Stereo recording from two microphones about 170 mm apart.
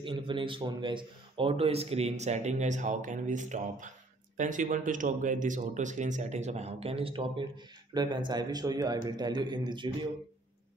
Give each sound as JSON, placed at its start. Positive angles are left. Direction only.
{"t": 0.0, "sound": "a man's voice", "side_deg": -30}